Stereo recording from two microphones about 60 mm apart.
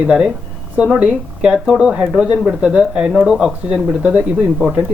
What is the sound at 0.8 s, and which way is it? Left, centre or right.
Speech, centre.